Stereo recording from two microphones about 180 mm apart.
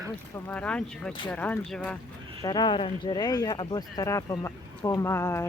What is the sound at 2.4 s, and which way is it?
Speech, 25° left (ahead or behind).